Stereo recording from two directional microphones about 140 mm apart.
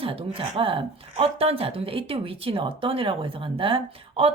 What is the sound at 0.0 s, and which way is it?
A woman's voice, 40° right (ahead or behind).